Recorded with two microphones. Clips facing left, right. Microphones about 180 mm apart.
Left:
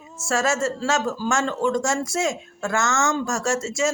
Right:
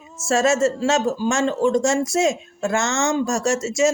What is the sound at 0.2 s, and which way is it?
Speech, 25° right (ahead or behind).